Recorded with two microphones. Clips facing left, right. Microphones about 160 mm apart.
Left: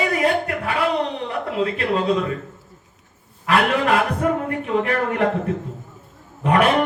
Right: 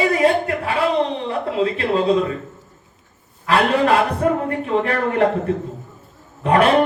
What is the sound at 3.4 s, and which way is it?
Speech, 35° right (ahead or behind).